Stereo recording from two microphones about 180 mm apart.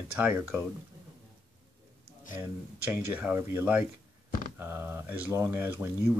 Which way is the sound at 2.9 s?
10° right (ahead or behind).